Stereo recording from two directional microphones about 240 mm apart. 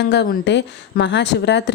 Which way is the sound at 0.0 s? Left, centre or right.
Left.